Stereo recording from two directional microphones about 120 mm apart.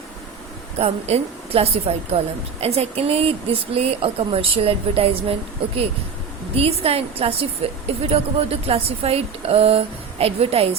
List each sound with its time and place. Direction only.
0.8 s a woman's voice: 60° right (ahead or behind)